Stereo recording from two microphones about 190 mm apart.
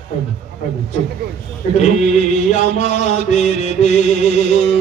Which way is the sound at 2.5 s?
40° left (ahead or behind).